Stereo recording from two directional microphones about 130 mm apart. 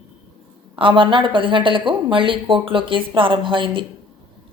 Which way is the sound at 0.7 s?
40° right (ahead or behind).